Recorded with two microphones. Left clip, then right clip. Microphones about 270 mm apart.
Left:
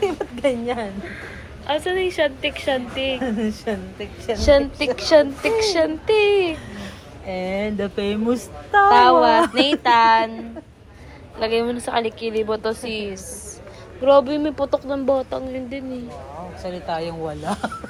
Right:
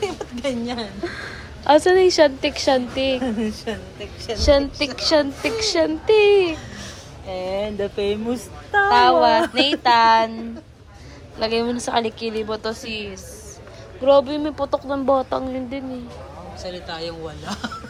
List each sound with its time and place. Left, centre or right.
0.0 s a sound: left
1.6 s a woman's voice: right
3.2 s speech: left
4.4 s a woman's voice: centre
7.3 s speech: left
8.9 s a woman's voice: centre
11.3 s a woman's voice: centre
16.6 s speech: centre